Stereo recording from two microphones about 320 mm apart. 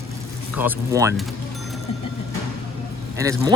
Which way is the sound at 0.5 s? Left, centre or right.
Centre.